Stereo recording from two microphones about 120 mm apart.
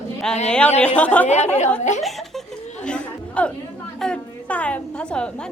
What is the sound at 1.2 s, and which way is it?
Speech, 70° left (ahead or behind).